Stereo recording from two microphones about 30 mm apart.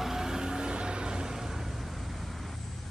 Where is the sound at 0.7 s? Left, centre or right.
Right.